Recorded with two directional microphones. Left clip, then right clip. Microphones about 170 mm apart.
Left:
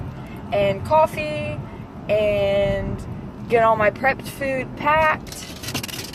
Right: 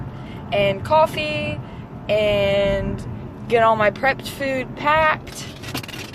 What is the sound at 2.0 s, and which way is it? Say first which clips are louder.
Speech: right 1 dB; 30° right (ahead or behind).